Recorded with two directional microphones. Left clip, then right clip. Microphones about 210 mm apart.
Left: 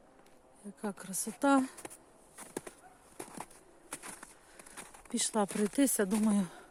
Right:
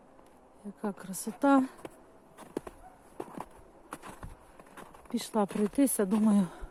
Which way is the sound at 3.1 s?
15° left (ahead or behind).